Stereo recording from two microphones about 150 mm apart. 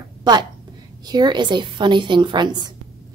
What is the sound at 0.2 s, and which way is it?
A woman's voice, 30° right (ahead or behind).